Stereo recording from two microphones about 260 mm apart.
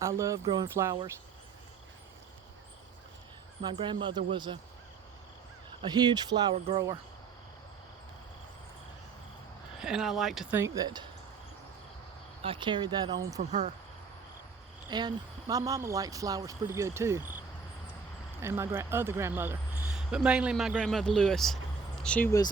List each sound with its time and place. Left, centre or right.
0.0 s speech: centre
3.6 s speech: centre
5.8 s speech: centre
9.8 s speech: centre
12.4 s speech: centre
13.5 s speech: right
14.8 s speech: centre
18.4 s speech: centre